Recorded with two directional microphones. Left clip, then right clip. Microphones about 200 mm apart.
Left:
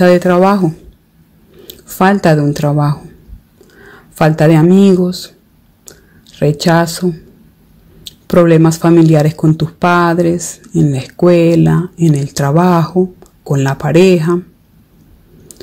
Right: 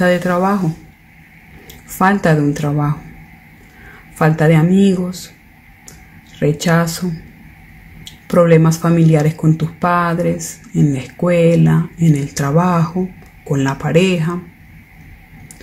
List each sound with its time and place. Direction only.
0.0 s speech: 45° left (ahead or behind)
1.9 s speech: 40° left (ahead or behind)
4.2 s speech: 45° left (ahead or behind)
6.4 s speech: 40° left (ahead or behind)